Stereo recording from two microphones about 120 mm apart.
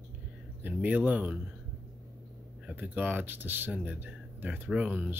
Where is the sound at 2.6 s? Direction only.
15° right (ahead or behind).